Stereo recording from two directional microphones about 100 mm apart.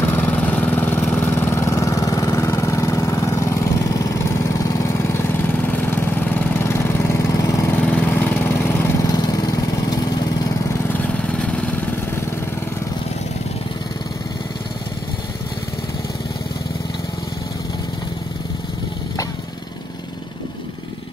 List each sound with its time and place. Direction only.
0.0 s vehicle: 20° left (ahead or behind)
5.7 s vehicle: 20° left (ahead or behind); by 7.7 s 35° left (ahead or behind)
7.7 s lawn mower: 15° left (ahead or behind)
9.0 s lawn mower: 40° left (ahead or behind)
10.9 s lawn mower: 15° left (ahead or behind)